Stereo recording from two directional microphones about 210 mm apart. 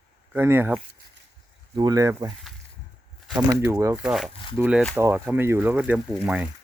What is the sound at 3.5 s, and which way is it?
Speech, 15° right (ahead or behind).